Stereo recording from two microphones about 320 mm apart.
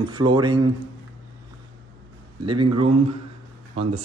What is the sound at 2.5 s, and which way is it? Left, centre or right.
Speech, centre.